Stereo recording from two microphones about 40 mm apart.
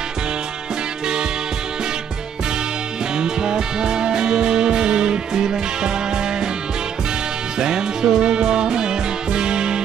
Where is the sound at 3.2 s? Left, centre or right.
Centre.